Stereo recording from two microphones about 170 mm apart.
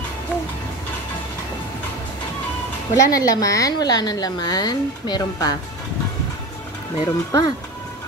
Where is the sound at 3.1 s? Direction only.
20° left (ahead or behind).